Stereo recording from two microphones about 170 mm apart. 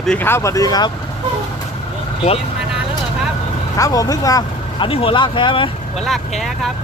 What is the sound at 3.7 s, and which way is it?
Speech, 20° left (ahead or behind).